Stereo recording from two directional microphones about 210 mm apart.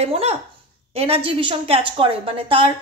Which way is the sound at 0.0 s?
30° right (ahead or behind).